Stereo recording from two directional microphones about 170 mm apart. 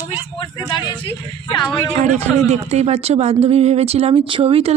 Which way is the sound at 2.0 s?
45° right (ahead or behind).